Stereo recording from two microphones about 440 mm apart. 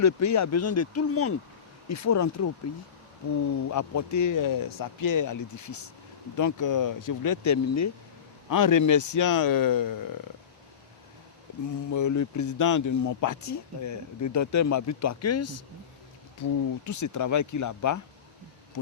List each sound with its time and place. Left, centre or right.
0.0 s speech: left
3.7 s speech: left
11.5 s a sound: left
11.9 s speech: left